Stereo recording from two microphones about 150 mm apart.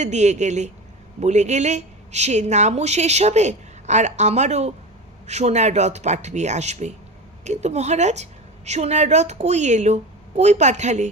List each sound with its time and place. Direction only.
0.0 s a woman's voice: 50° right (ahead or behind)